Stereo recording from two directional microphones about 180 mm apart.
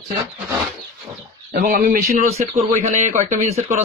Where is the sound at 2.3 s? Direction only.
40° right (ahead or behind).